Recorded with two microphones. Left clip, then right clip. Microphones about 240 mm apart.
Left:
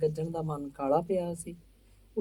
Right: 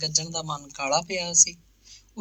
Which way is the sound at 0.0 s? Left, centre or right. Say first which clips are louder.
Right 3 dB; right.